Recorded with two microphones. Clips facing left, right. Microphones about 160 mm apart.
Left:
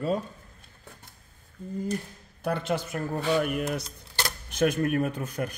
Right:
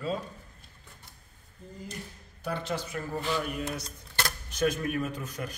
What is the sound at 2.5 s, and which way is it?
Speech, 55° left (ahead or behind).